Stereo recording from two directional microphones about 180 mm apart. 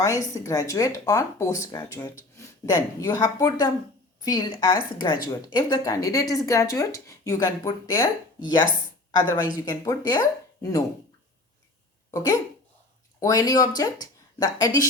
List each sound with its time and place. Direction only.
0.3 s speech: 15° left (ahead or behind)
13.1 s speech: 20° left (ahead or behind)